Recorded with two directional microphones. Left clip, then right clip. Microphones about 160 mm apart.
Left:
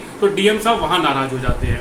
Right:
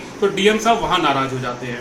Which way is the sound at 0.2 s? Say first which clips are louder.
Left 1 dB; 5° right (ahead or behind).